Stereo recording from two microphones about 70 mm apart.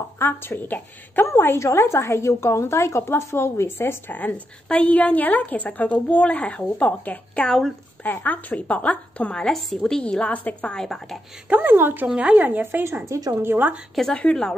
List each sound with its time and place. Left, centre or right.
0.2 s a woman's voice: left
10.8 s a woman's voice: centre
11.4 s speech: right
12.1 s speech: centre
14.1 s a woman's voice: centre